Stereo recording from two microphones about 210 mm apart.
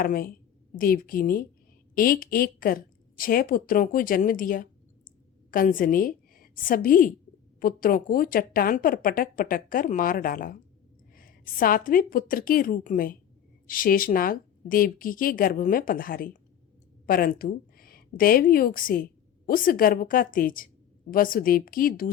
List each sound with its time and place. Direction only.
0.0 s a woman's voice: 45° left (ahead or behind)